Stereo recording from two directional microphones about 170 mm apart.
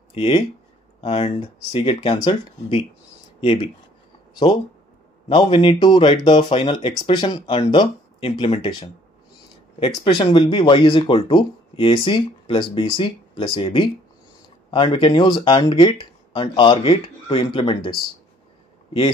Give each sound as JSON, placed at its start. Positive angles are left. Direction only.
{"t": 0.1, "sound": "speech", "side_deg": 30}
{"t": 5.3, "sound": "speech", "side_deg": 30}